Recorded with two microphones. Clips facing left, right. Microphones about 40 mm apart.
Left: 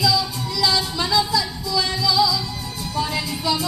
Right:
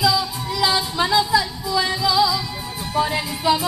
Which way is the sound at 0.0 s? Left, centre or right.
Centre.